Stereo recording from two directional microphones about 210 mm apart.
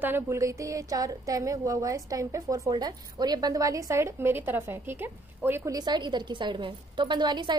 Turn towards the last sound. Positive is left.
turn(degrees=-20)  # may be behind; listen again after turning